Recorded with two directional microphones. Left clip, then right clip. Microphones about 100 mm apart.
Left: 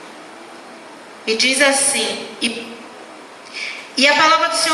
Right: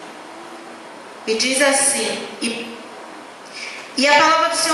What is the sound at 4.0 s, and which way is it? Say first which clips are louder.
Speech: left 1 dB; 10° left (ahead or behind).